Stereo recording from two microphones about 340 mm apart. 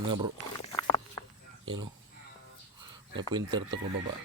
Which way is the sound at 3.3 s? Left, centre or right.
Centre.